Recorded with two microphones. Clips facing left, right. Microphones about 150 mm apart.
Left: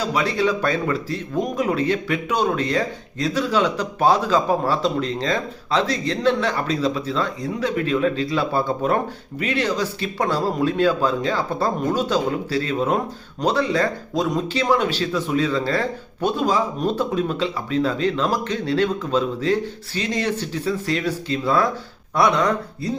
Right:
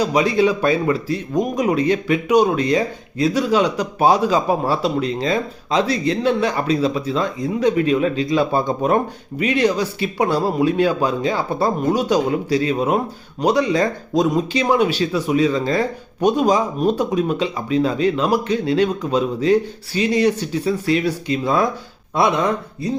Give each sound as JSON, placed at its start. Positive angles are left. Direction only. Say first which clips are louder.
{"t": 0.0, "sound": "speech", "louder": "right 5 dB", "side_deg": -15}